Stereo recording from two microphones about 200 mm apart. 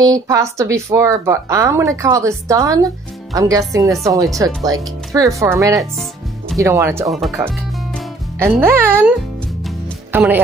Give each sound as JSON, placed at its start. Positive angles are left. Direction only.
{"t": 0.0, "sound": "speech", "side_deg": -15}
{"t": 7.1, "sound": "speech", "side_deg": 0}
{"t": 8.4, "sound": "speech", "side_deg": -10}
{"t": 9.7, "sound": "music", "side_deg": -10}